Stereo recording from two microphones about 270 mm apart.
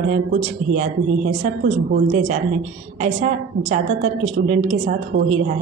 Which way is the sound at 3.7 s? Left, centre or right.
Right.